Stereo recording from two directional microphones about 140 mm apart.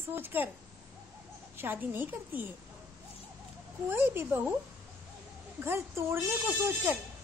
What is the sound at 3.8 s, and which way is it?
Speech, 15° right (ahead or behind).